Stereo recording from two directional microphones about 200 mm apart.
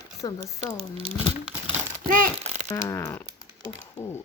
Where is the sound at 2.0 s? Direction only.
45° right (ahead or behind).